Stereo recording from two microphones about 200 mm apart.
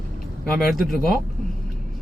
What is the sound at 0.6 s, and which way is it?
Speech, centre (ahead or behind).